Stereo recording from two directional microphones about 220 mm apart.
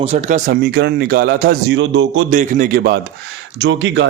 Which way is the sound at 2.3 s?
35° right (ahead or behind).